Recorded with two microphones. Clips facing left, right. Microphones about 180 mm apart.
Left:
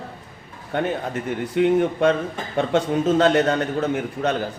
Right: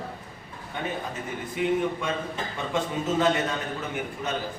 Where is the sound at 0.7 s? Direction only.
70° left (ahead or behind).